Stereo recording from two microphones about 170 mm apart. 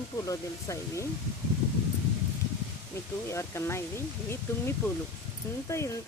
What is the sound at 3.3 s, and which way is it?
Speech, 15° left (ahead or behind).